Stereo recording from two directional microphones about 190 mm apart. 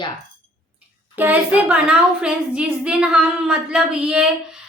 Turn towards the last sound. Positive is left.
turn(degrees=-5)  # may be behind; listen again after turning